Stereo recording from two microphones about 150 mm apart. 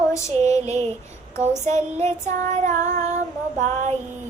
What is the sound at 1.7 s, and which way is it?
Child singing, 50° right (ahead or behind).